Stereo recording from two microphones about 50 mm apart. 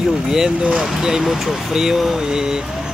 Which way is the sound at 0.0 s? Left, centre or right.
Centre.